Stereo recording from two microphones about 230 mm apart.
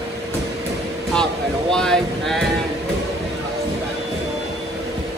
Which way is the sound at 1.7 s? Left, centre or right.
Centre.